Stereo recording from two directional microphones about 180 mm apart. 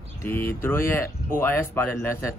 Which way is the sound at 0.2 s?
10° left (ahead or behind).